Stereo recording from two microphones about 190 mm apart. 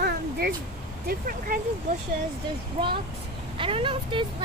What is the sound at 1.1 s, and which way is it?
Speech, 50° right (ahead or behind).